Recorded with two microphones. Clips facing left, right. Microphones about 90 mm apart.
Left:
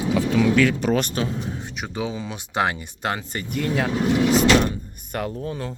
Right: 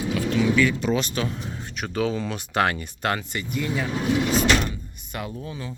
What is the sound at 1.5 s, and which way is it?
Speech, 20° left (ahead or behind).